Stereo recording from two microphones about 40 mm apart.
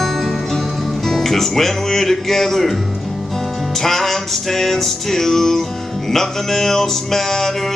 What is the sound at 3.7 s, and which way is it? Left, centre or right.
Music, centre.